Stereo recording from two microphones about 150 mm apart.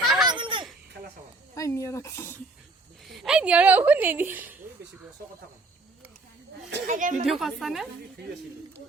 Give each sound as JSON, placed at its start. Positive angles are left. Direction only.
{"t": 0.0, "sound": "a sound", "side_deg": 0}
{"t": 0.3, "sound": "a sound", "side_deg": -30}
{"t": 1.5, "sound": "speech", "side_deg": 20}
{"t": 3.1, "sound": "a woman's voice", "side_deg": 0}
{"t": 6.8, "sound": "a woman's voice", "side_deg": -60}
{"t": 7.3, "sound": "a woman's voice", "side_deg": 0}